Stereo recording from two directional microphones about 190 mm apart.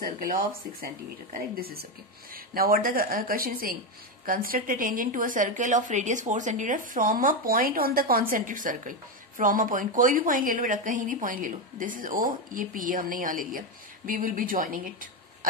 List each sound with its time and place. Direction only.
0.0 s a woman's voice: 45° right (ahead or behind)